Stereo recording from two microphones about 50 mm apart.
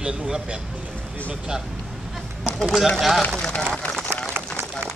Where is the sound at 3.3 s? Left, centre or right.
Centre.